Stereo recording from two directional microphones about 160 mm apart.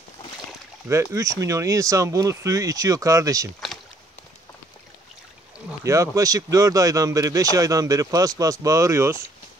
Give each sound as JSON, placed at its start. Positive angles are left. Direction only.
{"t": 1.1, "sound": "speech", "side_deg": -20}
{"t": 5.9, "sound": "speech", "side_deg": -20}